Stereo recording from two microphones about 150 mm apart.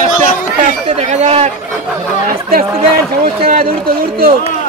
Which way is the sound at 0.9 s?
50° right (ahead or behind).